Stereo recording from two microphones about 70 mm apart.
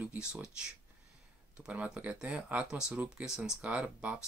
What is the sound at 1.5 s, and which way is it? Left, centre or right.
Speech, centre.